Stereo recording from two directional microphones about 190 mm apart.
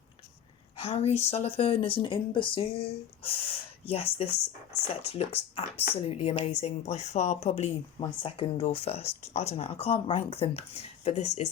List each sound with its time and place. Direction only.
0.8 s speech: 30° left (ahead or behind)